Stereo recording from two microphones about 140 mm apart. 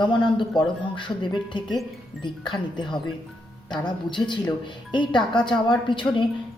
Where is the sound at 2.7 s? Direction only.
35° left (ahead or behind).